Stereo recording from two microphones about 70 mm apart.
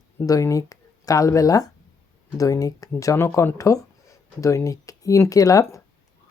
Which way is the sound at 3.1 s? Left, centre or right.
Left.